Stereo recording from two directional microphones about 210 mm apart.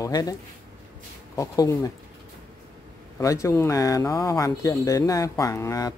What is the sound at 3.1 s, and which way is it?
Speech, 15° left (ahead or behind).